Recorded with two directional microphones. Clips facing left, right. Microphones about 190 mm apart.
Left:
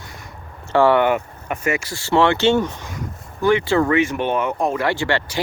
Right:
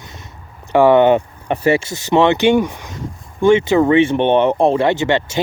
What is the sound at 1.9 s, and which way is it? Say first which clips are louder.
Speech: right 3 dB; 20° right (ahead or behind).